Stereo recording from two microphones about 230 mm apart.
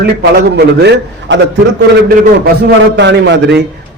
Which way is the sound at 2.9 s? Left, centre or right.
Right.